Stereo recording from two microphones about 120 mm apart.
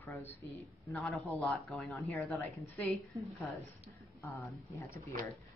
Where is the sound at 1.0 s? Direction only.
Centre (ahead or behind).